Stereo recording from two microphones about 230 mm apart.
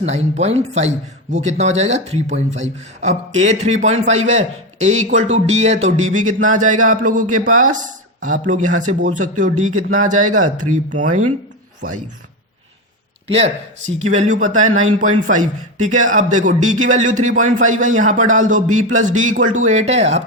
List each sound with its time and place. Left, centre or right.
0.0 s a man's voice: right
13.2 s a man's voice: right